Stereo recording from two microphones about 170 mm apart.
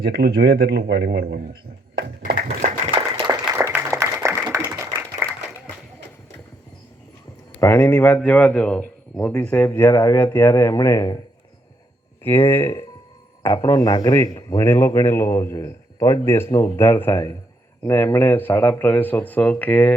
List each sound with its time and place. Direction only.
0.0 s a man's voice: 70° right (ahead or behind)
2.0 s a sound: 65° right (ahead or behind)
2.9 s a sound: 25° right (ahead or behind)
3.5 s applause: 15° right (ahead or behind)
7.6 s a man's voice: 15° left (ahead or behind)
12.5 s a man's voice: 15° left (ahead or behind)